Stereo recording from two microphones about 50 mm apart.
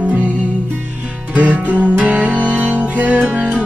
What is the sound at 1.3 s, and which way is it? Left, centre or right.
Music, right.